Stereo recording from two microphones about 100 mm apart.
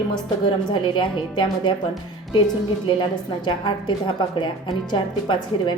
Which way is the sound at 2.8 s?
50° left (ahead or behind).